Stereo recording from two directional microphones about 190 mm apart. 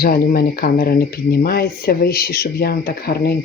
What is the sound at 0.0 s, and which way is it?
Speech, 50° left (ahead or behind).